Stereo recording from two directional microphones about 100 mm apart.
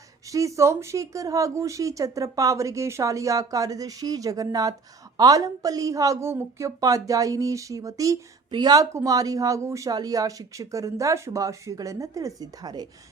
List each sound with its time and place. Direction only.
0.3 s speech: 30° right (ahead or behind)